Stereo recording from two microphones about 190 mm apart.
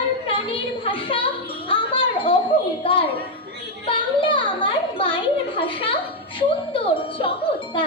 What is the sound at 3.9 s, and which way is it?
Speech, 25° left (ahead or behind).